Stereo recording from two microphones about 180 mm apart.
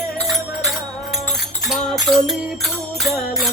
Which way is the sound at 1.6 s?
Centre (ahead or behind).